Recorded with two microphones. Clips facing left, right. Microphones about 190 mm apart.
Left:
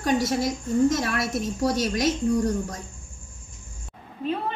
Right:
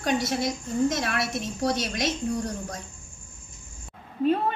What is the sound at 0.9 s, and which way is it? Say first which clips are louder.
A woman's voice: left 3 dB; 45° left (ahead or behind).